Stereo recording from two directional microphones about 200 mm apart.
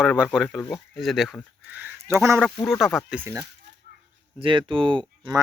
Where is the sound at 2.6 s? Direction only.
Centre (ahead or behind).